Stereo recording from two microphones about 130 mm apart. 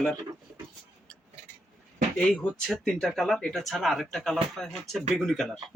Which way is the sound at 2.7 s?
Centre (ahead or behind).